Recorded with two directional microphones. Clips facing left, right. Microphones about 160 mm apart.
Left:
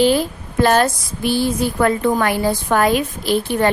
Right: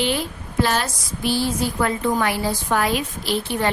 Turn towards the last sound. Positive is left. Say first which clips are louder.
# left 6 dB
turn(degrees=50)  # may be behind; listen again after turning